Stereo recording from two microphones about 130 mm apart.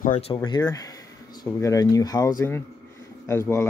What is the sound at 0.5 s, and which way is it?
Speech, 30° left (ahead or behind).